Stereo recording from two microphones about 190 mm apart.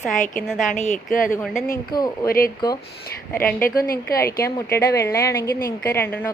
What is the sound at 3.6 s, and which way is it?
Speech, 50° left (ahead or behind).